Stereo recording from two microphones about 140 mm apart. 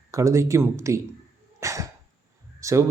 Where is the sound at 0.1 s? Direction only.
20° right (ahead or behind).